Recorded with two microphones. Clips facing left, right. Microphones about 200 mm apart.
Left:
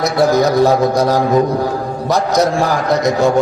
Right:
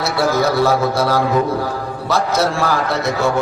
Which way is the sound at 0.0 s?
15° left (ahead or behind).